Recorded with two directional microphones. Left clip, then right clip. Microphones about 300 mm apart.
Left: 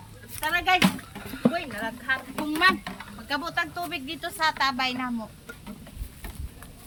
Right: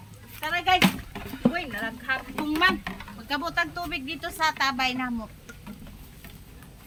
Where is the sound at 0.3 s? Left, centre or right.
Centre.